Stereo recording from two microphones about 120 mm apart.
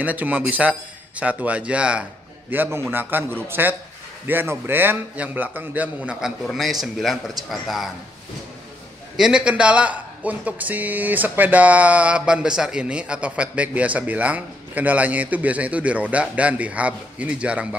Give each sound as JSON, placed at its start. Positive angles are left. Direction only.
{"t": 0.0, "sound": "a man's voice", "side_deg": -15}
{"t": 9.1, "sound": "a man's voice", "side_deg": -5}